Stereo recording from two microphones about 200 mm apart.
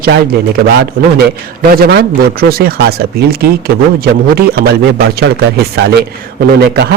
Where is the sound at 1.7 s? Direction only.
50° right (ahead or behind).